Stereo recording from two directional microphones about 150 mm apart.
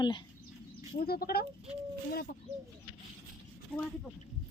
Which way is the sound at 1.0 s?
90° left.